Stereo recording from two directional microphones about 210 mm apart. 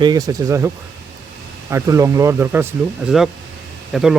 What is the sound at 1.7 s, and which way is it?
Speech, 15° right (ahead or behind).